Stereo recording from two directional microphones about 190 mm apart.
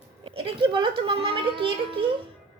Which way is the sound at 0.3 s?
30° right (ahead or behind).